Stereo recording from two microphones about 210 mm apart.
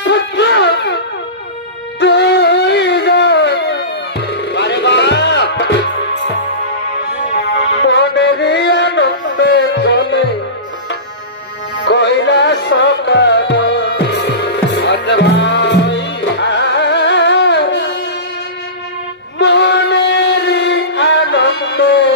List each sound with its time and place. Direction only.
0.0 s music: 55° left (ahead or behind)
2.0 s music: 55° left (ahead or behind)
7.4 s music: 55° left (ahead or behind)
11.8 s music: 55° left (ahead or behind)
19.4 s music: 55° left (ahead or behind)